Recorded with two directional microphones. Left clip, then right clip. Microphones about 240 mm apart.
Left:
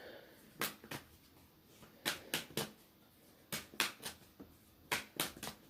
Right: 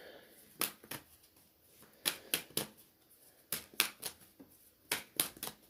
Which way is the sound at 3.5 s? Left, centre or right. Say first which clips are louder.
Right 2 dB; right.